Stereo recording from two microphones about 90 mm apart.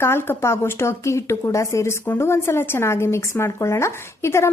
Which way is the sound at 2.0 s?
25° left (ahead or behind).